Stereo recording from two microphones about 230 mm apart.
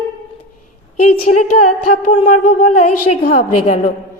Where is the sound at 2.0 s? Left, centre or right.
Left.